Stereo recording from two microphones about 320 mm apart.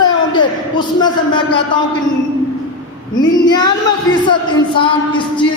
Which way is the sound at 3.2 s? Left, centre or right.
Centre.